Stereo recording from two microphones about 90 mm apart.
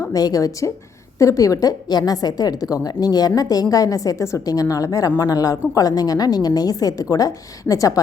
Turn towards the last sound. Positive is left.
turn(degrees=40)  # may be behind; listen again after turning